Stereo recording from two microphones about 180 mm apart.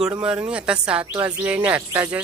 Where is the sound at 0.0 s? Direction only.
5° right (ahead or behind).